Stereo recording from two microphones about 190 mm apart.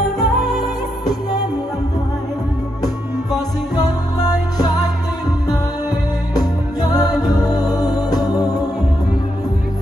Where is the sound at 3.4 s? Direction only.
20° left (ahead or behind).